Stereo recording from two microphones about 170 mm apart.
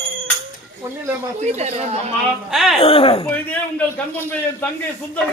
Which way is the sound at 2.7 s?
35° left (ahead or behind).